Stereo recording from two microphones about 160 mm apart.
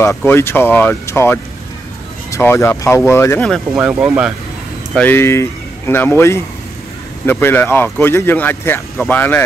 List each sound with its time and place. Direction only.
0.0 s speech: 15° left (ahead or behind)
3.7 s speech: 5° right (ahead or behind)
4.9 s speech: 10° left (ahead or behind)